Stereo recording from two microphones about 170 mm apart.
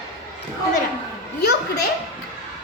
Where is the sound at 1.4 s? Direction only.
70° left (ahead or behind).